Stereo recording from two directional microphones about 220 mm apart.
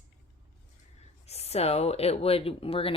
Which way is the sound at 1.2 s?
30° left (ahead or behind).